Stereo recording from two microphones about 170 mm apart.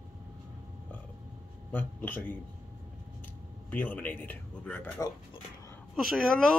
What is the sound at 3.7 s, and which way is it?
Speech, 10° left (ahead or behind).